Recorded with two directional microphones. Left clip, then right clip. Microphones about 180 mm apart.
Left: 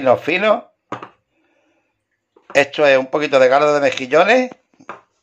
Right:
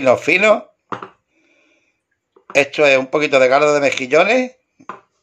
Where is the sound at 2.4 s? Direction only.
Centre (ahead or behind).